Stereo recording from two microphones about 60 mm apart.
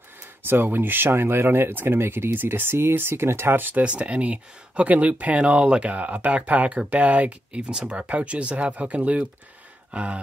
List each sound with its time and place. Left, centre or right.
0.4 s speech: right
3.8 s speech: right
9.8 s gasp: centre